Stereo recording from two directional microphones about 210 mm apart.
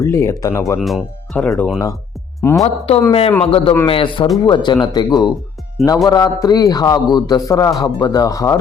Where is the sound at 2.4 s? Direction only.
10° left (ahead or behind).